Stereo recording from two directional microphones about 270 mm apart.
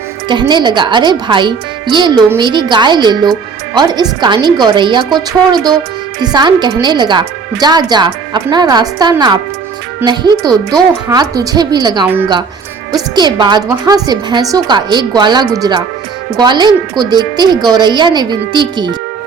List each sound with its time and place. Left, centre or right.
0.3 s a woman's voice: centre